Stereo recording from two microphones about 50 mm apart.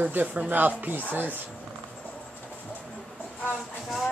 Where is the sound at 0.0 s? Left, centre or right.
Right.